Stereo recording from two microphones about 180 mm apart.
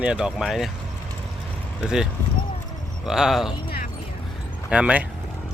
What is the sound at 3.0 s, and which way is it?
Speech, 5° right (ahead or behind).